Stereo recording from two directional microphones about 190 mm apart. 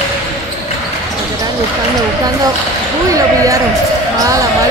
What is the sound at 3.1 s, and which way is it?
Basketball bounce, 15° right (ahead or behind).